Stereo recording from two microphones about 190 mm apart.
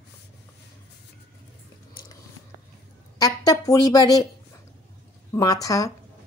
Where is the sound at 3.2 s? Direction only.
20° left (ahead or behind).